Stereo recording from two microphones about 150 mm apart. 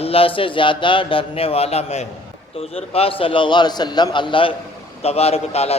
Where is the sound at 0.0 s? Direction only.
40° left (ahead or behind).